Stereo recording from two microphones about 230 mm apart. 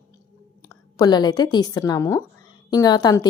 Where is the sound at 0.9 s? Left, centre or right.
Centre.